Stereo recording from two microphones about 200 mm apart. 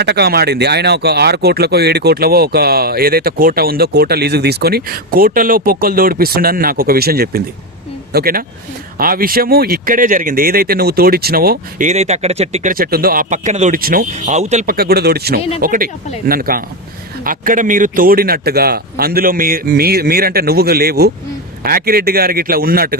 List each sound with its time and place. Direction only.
0.0 s speech: 55° right (ahead or behind); by 12.7 s 30° right (ahead or behind)
12.7 s speech: 50° right (ahead or behind)
14.8 s speech: 50° right (ahead or behind)